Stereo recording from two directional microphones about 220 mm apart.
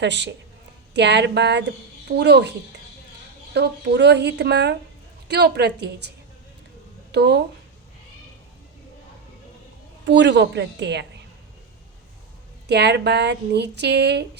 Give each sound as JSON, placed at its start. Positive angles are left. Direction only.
{"t": 0.0, "sound": "speech", "side_deg": -50}
{"t": 3.5, "sound": "speech", "side_deg": -50}
{"t": 7.1, "sound": "speech", "side_deg": -50}
{"t": 10.1, "sound": "speech", "side_deg": -55}
{"t": 12.6, "sound": "speech", "side_deg": -50}